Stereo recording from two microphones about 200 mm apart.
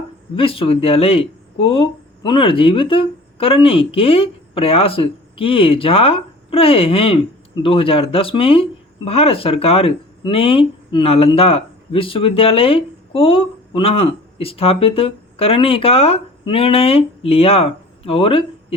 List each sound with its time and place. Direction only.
0.3 s speech: 25° left (ahead or behind)